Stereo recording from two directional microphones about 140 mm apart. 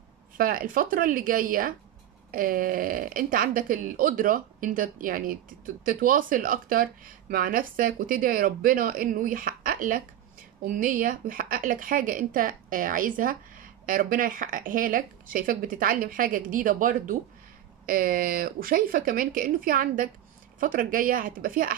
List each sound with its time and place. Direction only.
0.4 s a woman's voice: 85° right
17.8 s speech: 90° right
20.5 s speech: 75° right (ahead or behind)